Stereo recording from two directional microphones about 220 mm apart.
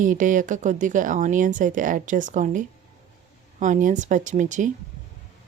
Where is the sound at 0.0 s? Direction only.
35° right (ahead or behind).